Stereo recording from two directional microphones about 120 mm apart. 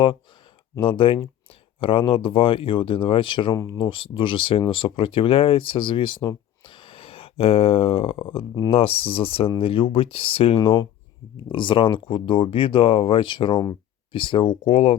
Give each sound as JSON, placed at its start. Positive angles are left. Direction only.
{"t": 0.8, "sound": "speech", "side_deg": 45}